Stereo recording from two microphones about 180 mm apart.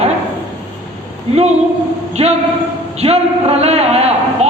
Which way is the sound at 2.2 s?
35° right (ahead or behind).